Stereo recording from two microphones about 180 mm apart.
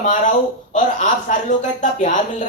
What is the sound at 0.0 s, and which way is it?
Speech, 40° left (ahead or behind).